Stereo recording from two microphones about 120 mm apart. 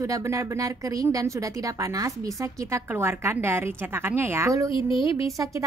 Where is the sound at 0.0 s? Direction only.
25° right (ahead or behind).